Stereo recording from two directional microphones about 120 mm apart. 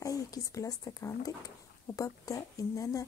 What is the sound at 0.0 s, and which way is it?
Speech, 30° left (ahead or behind).